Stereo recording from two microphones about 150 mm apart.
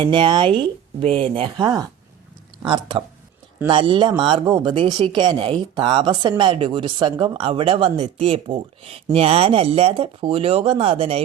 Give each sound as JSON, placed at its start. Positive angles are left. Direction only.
{"t": 0.0, "sound": "speech", "side_deg": -30}